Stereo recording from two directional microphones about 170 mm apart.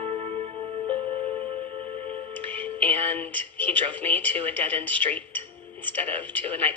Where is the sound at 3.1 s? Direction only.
10° left (ahead or behind).